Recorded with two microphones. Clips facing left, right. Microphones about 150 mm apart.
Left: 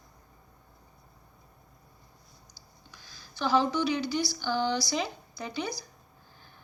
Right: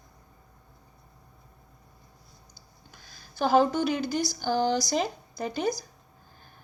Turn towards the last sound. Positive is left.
turn(degrees=-45)  # may be behind; listen again after turning